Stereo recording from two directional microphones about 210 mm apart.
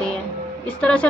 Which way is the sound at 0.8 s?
5° left (ahead or behind).